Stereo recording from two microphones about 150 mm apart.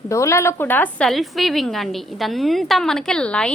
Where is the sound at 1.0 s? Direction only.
Centre (ahead or behind).